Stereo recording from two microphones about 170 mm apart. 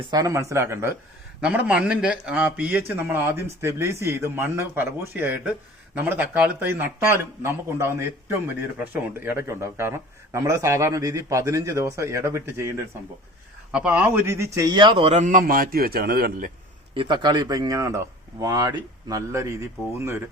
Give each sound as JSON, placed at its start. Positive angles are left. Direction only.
{"t": 0.0, "sound": "a man's voice", "side_deg": -20}
{"t": 16.9, "sound": "speech", "side_deg": -30}